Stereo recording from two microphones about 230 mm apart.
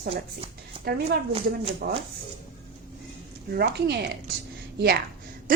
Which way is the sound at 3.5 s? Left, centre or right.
Right.